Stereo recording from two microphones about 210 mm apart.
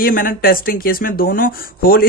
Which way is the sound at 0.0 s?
40° left (ahead or behind).